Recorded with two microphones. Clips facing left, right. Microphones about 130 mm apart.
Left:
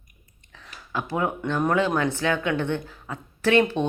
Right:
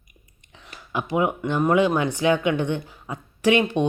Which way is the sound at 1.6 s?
10° right (ahead or behind).